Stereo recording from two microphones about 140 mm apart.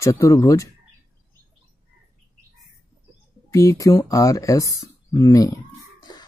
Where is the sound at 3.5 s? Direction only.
25° left (ahead or behind).